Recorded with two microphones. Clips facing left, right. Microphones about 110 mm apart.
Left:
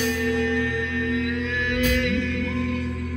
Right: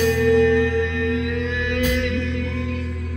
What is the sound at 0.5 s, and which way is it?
Singing bowl, 25° right (ahead or behind).